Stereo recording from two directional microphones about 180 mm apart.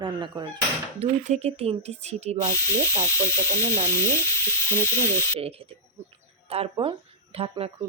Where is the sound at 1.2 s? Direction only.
40° right (ahead or behind).